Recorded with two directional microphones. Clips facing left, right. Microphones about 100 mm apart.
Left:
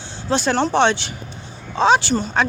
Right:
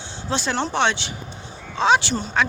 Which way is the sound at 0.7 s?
40° left (ahead or behind).